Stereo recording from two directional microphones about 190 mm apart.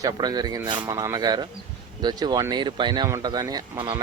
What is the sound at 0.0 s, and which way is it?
Speech, 20° right (ahead or behind).